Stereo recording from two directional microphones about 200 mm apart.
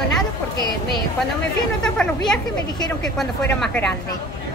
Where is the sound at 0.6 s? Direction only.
20° right (ahead or behind).